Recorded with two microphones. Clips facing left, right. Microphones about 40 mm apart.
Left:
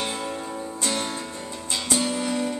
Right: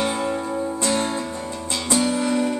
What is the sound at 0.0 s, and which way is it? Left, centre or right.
Music, right.